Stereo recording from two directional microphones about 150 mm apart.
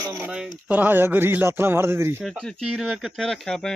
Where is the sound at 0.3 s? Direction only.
5° right (ahead or behind).